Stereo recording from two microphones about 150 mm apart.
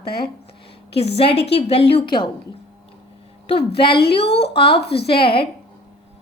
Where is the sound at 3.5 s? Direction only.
35° left (ahead or behind).